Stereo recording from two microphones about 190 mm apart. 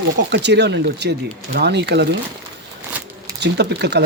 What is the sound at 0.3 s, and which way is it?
Speech, 65° right (ahead or behind).